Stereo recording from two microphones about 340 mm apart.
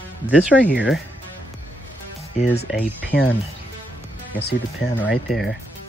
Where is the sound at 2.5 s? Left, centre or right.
Left.